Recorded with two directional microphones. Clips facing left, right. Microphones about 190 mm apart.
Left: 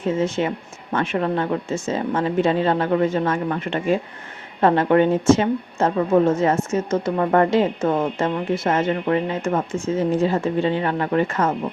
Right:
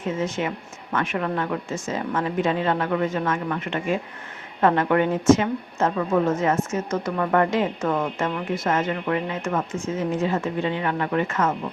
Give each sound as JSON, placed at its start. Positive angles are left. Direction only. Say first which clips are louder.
{"t": 0.0, "sound": "a woman's voice", "louder": "left 5 dB", "side_deg": 30}